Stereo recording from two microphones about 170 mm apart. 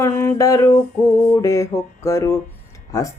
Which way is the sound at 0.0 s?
15° left (ahead or behind).